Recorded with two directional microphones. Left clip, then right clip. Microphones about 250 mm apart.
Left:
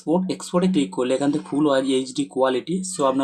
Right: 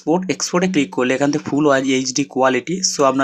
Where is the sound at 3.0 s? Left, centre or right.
Right.